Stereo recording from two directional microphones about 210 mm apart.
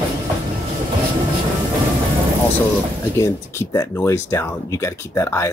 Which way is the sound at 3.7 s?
15° left (ahead or behind).